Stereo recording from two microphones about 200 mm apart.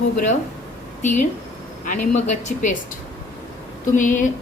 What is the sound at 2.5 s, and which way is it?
Speech, 40° left (ahead or behind).